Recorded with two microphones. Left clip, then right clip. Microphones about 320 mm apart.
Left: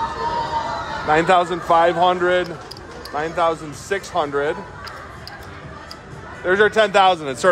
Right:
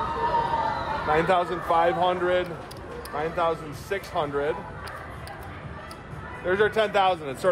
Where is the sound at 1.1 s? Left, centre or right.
Left.